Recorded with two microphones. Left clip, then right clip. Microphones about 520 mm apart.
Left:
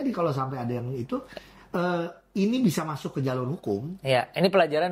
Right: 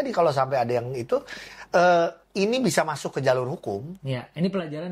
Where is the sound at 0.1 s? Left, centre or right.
Right.